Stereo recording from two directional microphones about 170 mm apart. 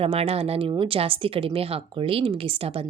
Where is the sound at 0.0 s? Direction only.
35° right (ahead or behind).